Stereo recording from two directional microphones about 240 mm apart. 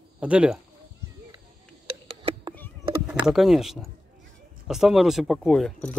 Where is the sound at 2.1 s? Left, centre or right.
Right.